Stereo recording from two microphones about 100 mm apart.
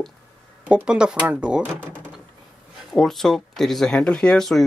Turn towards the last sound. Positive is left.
turn(degrees=5)  # may be behind; listen again after turning